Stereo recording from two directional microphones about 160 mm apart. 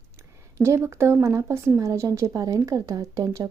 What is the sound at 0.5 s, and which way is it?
A woman's voice, 15° right (ahead or behind).